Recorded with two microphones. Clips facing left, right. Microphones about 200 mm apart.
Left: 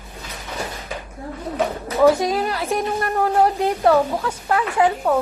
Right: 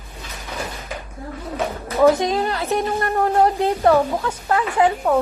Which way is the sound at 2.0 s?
5° left (ahead or behind).